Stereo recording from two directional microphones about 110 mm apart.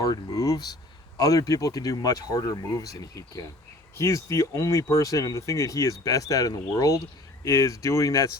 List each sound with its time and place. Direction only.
0.0 s speech: 35° left (ahead or behind)